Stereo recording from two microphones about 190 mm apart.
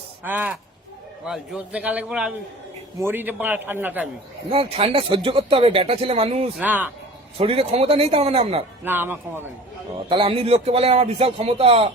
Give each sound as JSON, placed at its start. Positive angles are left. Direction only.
{"t": 0.3, "sound": "a man's voice", "side_deg": -10}
{"t": 4.5, "sound": "speech", "side_deg": -30}
{"t": 6.6, "sound": "a man's voice", "side_deg": -10}
{"t": 7.3, "sound": "speech", "side_deg": -30}
{"t": 8.8, "sound": "a man's voice", "side_deg": -10}
{"t": 10.1, "sound": "speech", "side_deg": -30}